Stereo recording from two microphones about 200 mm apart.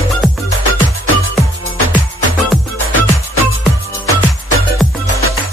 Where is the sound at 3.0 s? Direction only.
85° right.